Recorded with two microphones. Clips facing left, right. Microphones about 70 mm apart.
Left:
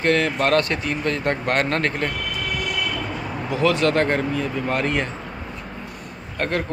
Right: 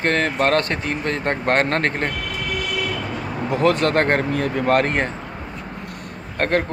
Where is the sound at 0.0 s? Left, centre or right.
Right.